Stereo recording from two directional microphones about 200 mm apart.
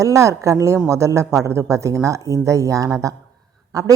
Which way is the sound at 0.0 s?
15° right (ahead or behind).